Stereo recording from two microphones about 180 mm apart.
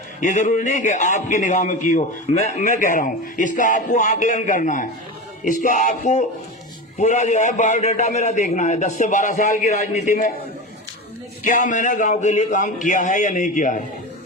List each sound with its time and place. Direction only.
0.2 s a man's voice: 40° left (ahead or behind)
11.4 s a man's voice: 45° left (ahead or behind)